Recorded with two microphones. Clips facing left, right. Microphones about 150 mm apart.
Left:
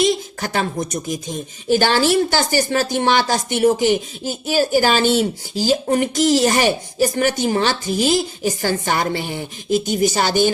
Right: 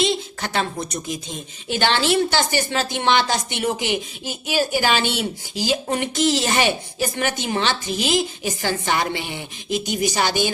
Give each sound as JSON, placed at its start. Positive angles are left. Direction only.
{"t": 0.0, "sound": "a woman's voice", "side_deg": 45}